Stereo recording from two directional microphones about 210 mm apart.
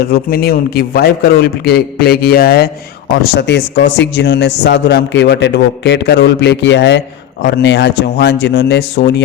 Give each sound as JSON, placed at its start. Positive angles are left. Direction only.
{"t": 0.1, "sound": "a man's voice", "side_deg": 45}